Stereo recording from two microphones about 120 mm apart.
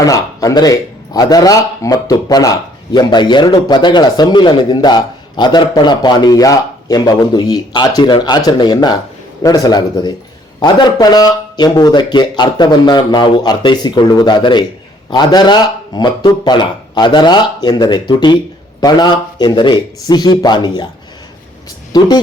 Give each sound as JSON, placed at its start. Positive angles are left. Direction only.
{"t": 0.0, "sound": "speech", "side_deg": 30}
{"t": 21.9, "sound": "speech", "side_deg": 35}